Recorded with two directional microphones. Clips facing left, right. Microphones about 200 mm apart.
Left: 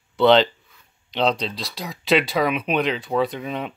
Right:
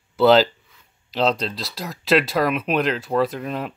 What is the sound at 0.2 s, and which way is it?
Speech, 5° right (ahead or behind).